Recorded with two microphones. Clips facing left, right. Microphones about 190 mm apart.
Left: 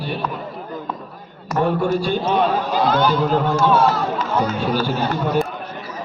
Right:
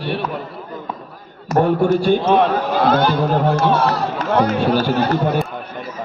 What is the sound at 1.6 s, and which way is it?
A man's voice, 45° right (ahead or behind).